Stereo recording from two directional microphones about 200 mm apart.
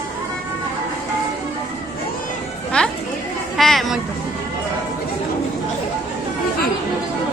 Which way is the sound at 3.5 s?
Centre (ahead or behind).